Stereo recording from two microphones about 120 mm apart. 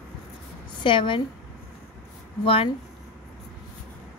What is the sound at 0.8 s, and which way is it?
Speech, 45° left (ahead or behind).